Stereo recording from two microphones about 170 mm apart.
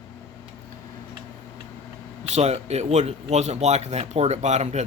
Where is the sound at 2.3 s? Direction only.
40° right (ahead or behind).